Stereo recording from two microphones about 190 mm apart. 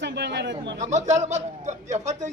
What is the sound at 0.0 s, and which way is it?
Speech, 65° right (ahead or behind).